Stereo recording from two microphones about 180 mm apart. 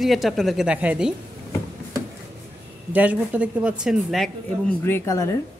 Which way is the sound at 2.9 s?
10° right (ahead or behind).